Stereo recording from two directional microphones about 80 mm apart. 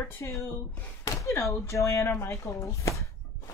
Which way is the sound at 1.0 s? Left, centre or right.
Left.